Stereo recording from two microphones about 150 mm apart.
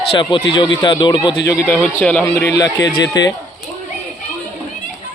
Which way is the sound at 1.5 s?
20° left (ahead or behind).